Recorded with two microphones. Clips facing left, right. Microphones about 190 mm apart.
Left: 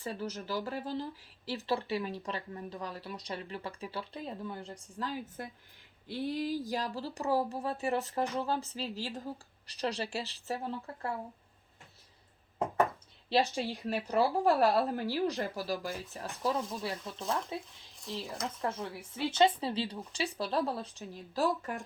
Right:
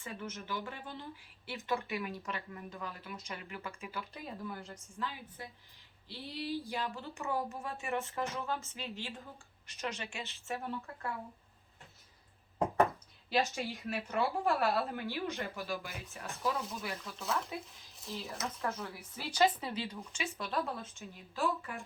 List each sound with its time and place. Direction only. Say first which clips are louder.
0.0 s speech: left 5 dB; 35° left (ahead or behind)
6.1 s speech: left 6 dB; 50° left (ahead or behind); by 11.1 s 30° left (ahead or behind)
13.3 s speech: left 4 dB; 35° left (ahead or behind)
17.9 s speech: left 3 dB; centre (ahead or behind)
18.6 s speech: left 3 dB; 25° left (ahead or behind)